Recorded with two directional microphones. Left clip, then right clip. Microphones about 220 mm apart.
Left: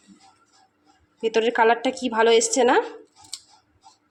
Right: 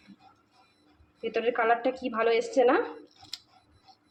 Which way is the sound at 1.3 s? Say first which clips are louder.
Left 6 dB; 55° left (ahead or behind).